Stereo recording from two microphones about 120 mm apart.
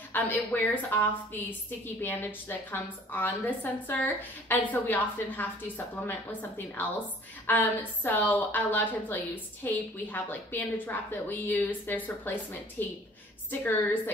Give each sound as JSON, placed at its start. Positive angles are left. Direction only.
{"t": 0.1, "sound": "a woman's voice", "side_deg": 15}
{"t": 7.4, "sound": "a woman's voice", "side_deg": 15}